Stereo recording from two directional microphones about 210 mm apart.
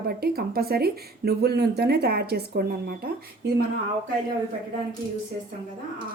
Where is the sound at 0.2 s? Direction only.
45° right (ahead or behind).